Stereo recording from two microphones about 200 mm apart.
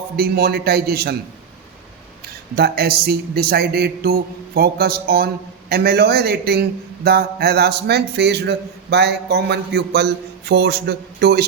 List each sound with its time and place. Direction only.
0.2 s a man's voice: 50° right (ahead or behind)
2.6 s a man's voice: 50° right (ahead or behind)